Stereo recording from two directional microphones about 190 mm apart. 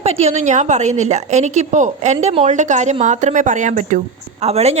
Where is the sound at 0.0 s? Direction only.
35° right (ahead or behind).